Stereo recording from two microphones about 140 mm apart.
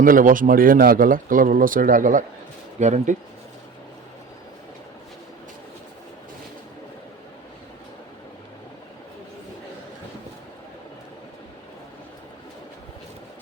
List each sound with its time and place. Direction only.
0.0 s speech: 80° right
2.7 s speech: 60° right (ahead or behind)